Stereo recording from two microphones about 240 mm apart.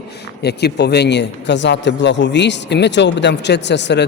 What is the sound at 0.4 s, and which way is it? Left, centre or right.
A man's voice, left.